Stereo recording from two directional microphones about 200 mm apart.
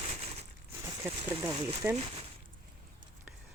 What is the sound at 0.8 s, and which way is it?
Speech, 15° right (ahead or behind).